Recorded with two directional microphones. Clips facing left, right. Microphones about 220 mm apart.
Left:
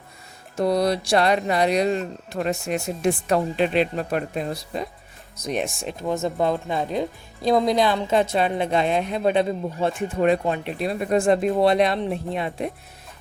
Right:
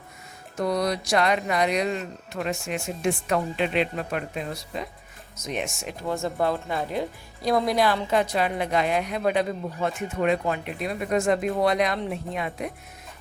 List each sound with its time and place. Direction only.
0.5 s speech: 30° left (ahead or behind)
6.1 s speech: 20° left (ahead or behind)